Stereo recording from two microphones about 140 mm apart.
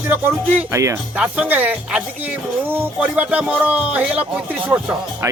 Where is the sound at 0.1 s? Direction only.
15° right (ahead or behind).